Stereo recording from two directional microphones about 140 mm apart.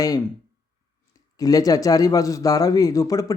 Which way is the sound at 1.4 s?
25° left (ahead or behind).